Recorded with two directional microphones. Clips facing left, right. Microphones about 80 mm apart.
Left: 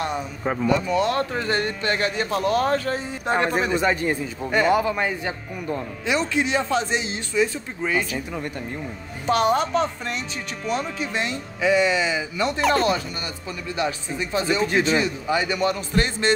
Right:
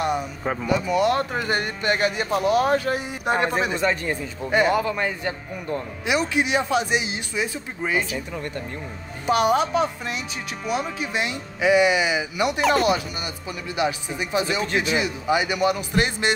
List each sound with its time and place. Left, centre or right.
0.0 s speech: centre
3.7 s speech: centre
4.5 s speech: centre
4.7 s a man's voice: centre
6.0 s speech: centre
9.2 s speech: centre